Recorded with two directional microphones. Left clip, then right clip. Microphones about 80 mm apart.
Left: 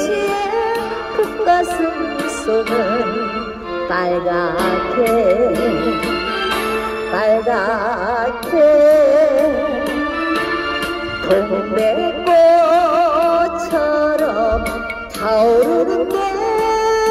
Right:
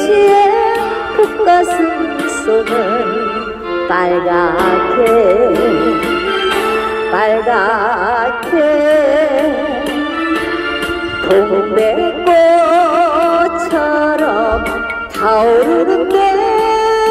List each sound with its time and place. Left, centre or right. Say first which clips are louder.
0.1 s music: right 10 dB; right
3.9 s music: right 5 dB; right
7.2 s music: right 2 dB; right
11.2 s music: right 5 dB; right; by 17.1 s centre